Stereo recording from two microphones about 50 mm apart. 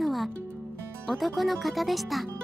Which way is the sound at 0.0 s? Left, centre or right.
Centre.